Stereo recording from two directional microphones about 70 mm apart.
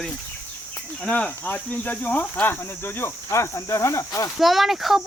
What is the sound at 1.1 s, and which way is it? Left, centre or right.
Cricket, left.